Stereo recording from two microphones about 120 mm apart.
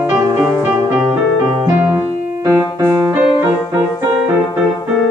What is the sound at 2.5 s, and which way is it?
Music, 30° right (ahead or behind).